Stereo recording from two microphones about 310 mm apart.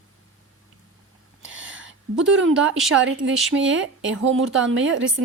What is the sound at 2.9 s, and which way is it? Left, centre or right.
A woman's voice, right.